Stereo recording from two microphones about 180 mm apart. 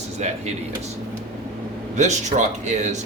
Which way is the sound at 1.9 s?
40° right (ahead or behind).